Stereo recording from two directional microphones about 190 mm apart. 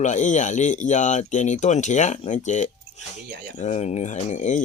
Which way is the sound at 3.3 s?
55° right (ahead or behind).